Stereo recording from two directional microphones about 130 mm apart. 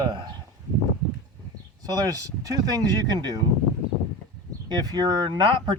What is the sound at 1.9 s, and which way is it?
Speech, 30° right (ahead or behind).